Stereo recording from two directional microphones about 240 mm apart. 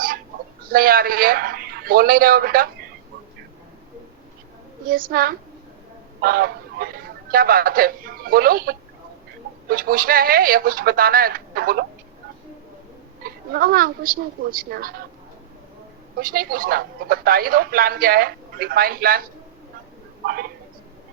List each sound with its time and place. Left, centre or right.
0.6 s speech: right
4.9 s speech: right
13.2 s speech: right
16.1 s speech: right
20.2 s speech: right